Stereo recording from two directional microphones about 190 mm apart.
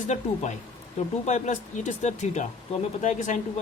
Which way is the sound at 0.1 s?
35° left (ahead or behind).